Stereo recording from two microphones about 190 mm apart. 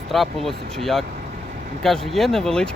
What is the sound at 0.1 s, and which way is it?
Speech, centre (ahead or behind).